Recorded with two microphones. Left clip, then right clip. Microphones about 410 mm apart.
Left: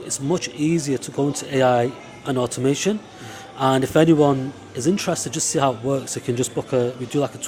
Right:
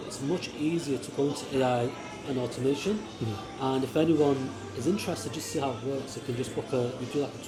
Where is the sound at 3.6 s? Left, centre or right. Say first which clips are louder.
Left 11 dB; left.